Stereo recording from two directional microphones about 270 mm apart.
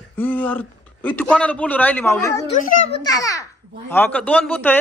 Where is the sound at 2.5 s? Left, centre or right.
Left.